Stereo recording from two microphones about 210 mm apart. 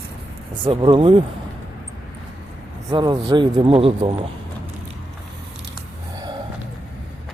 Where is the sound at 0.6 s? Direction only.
25° right (ahead or behind).